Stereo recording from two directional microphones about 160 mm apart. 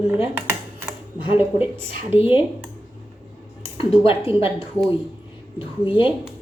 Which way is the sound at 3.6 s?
35° left (ahead or behind).